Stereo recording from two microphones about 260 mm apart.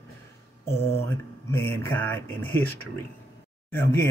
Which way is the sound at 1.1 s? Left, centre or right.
Centre.